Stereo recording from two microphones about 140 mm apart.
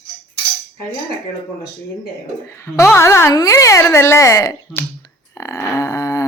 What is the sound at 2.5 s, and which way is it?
Speech, 20° left (ahead or behind).